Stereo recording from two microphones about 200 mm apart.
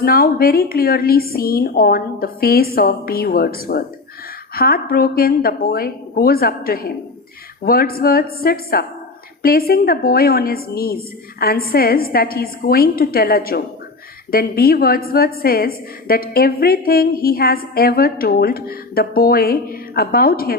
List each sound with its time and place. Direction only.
0.0 s a woman's voice: 50° left (ahead or behind)